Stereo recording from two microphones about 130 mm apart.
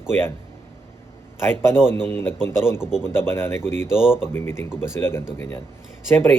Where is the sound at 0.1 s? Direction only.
20° left (ahead or behind).